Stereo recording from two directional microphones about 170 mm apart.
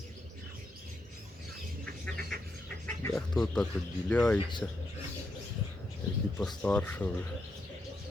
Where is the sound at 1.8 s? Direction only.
5° left (ahead or behind).